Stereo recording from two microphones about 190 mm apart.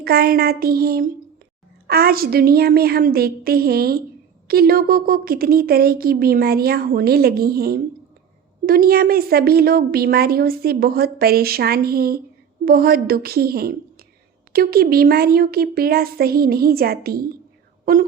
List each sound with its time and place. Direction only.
0.0 s a woman's voice: 55° right (ahead or behind)